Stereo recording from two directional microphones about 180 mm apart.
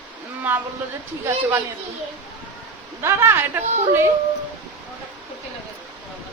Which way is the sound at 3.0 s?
15° right (ahead or behind).